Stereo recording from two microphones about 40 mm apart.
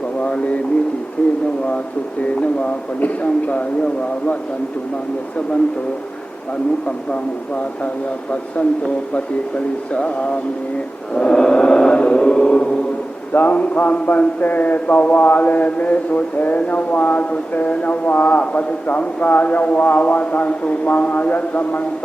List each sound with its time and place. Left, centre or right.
0.2 s a sound: left
1.2 s a man's voice: left
6.8 s a man's voice: left
9.9 s a man's voice: left
11.1 s music: left
13.3 s a man's voice: left